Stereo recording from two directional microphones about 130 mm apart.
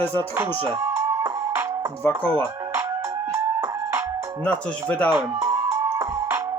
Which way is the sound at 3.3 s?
20° right (ahead or behind).